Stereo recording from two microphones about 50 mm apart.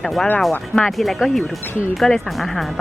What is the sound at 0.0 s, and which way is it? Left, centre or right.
Speech, centre.